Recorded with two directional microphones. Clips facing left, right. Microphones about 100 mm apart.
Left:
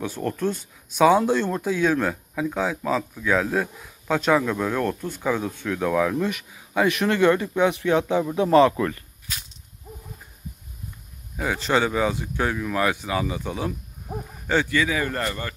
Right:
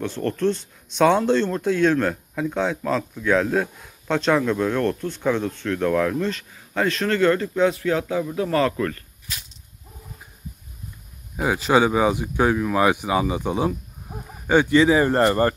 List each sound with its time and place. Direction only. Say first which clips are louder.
0.0 s speech: right 3 dB; 10° left (ahead or behind)
11.3 s speech: right 4 dB; 15° right (ahead or behind); by 15.5 s 40° right (ahead or behind)